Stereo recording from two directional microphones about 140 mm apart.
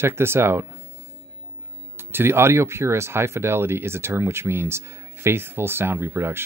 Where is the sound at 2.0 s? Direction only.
15° right (ahead or behind).